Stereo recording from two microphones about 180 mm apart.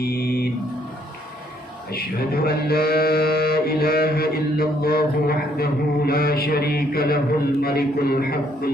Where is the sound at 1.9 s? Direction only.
60° left (ahead or behind).